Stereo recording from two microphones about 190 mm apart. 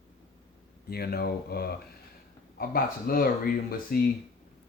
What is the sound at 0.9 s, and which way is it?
Speech, 55° left (ahead or behind).